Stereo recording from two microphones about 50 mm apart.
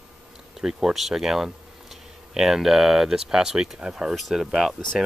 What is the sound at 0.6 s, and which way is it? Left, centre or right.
Speech, centre.